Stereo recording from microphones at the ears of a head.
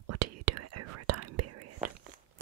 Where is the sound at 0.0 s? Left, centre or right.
Right.